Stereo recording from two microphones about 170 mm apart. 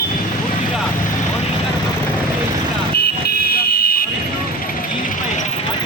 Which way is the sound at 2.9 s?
65° left (ahead or behind).